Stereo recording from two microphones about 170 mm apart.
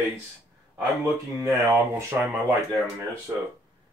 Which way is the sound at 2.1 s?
10° right (ahead or behind).